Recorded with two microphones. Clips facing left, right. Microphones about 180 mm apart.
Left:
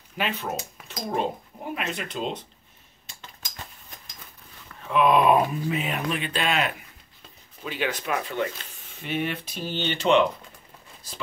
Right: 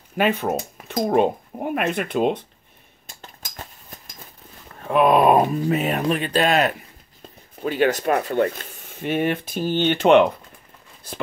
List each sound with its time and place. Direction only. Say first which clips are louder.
0.2 s speech: right 8 dB; 50° right (ahead or behind)
3.1 s cutlery: right 3 dB; 45° right (ahead or behind)
4.7 s speech: right 4 dB; 50° right (ahead or behind)